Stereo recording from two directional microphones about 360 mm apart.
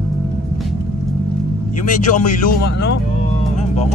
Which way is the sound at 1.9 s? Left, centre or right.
Left.